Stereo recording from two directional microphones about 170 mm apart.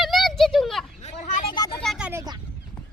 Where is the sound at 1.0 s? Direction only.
45° left (ahead or behind).